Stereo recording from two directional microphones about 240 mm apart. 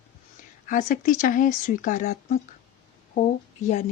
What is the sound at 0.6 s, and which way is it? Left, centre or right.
Speech, left.